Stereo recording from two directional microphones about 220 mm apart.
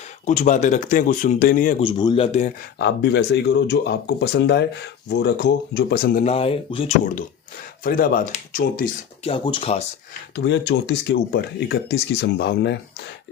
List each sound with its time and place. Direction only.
0.3 s speech: 35° left (ahead or behind)
1.8 s speech: 20° left (ahead or behind)
2.7 s speech: 50° left (ahead or behind)
6.2 s speech: 25° left (ahead or behind)
9.2 s speech: 25° left (ahead or behind)
10.3 s speech: 55° left (ahead or behind)